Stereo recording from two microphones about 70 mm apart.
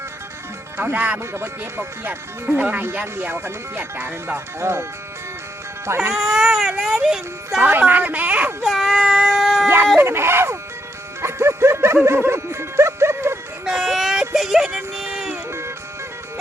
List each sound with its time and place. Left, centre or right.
0.8 s speech: right
1.2 s speech: right
6.1 s speech: centre
7.6 s speech: right
8.6 s baby cry: centre
9.4 s howl: centre
9.6 s a sound: right
10.0 s speech: right
11.2 s music: right
13.7 s a sound: centre
15.0 s music: centre